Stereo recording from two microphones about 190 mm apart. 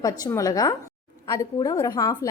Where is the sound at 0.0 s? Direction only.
15° left (ahead or behind).